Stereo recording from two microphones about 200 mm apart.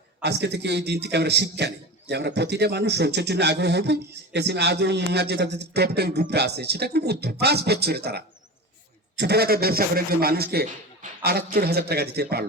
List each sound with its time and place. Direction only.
0.2 s a man's voice: 55° right (ahead or behind)